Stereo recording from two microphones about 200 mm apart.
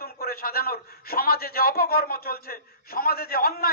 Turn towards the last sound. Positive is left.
turn(degrees=50)  # may be behind; listen again after turning